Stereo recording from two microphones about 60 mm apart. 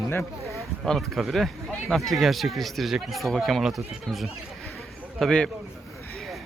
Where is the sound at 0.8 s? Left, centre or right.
Centre.